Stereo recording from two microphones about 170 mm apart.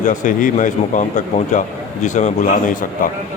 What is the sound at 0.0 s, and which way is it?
A man's voice, 50° left (ahead or behind).